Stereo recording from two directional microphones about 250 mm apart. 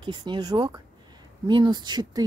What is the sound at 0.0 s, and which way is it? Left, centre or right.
Speech, centre.